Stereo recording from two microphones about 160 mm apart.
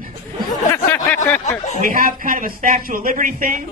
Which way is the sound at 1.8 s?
60° right (ahead or behind).